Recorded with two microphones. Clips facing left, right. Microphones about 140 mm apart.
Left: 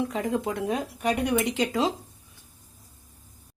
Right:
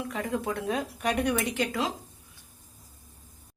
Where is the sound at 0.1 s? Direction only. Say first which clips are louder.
Left 3 dB; 20° left (ahead or behind).